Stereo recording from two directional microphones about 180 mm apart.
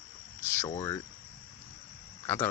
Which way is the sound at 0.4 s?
15° left (ahead or behind).